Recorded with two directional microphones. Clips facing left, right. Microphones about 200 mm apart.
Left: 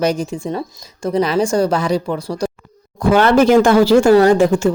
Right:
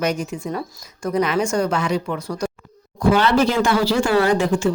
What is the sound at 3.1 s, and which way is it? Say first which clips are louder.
Speech: left 8 dB; 50° left (ahead or behind).